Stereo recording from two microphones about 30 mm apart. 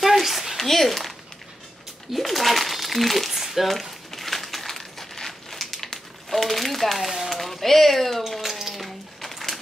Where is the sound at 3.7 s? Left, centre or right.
Centre.